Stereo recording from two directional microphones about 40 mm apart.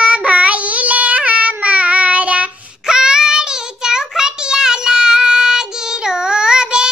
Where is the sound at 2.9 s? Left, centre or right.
Centre.